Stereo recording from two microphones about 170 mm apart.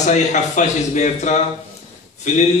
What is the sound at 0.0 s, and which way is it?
A man's voice, 45° left (ahead or behind).